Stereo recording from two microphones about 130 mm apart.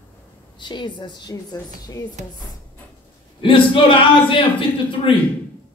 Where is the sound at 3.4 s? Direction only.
40° left (ahead or behind).